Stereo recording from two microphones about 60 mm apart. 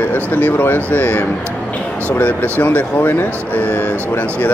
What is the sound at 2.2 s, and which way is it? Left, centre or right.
Speech, left.